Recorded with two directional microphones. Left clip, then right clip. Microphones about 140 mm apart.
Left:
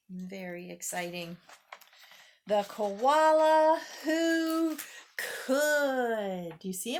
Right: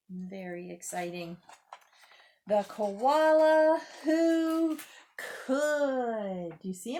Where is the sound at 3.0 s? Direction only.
10° left (ahead or behind).